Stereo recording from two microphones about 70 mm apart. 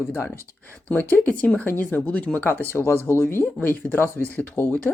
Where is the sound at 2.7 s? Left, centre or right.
Left.